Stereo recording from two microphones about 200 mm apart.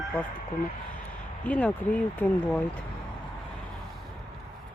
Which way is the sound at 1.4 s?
10° left (ahead or behind).